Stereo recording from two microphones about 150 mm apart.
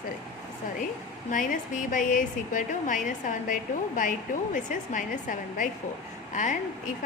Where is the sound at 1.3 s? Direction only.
60° left (ahead or behind).